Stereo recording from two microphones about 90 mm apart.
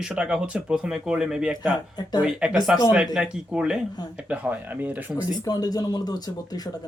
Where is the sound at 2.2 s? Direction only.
10° right (ahead or behind).